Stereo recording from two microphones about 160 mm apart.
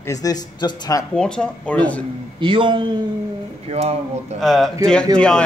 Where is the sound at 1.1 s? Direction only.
5° left (ahead or behind).